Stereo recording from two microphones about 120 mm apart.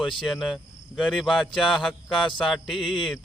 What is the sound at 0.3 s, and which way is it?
Cricket, centre (ahead or behind).